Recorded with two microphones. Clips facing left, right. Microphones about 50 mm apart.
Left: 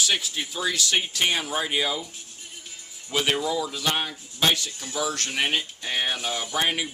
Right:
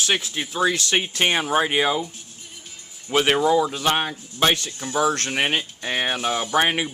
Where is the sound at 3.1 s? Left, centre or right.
Right.